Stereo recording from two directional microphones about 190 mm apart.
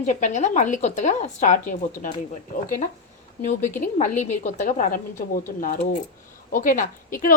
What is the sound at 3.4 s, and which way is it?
Speech, 40° left (ahead or behind).